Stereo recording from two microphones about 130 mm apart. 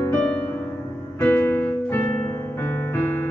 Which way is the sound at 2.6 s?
15° left (ahead or behind).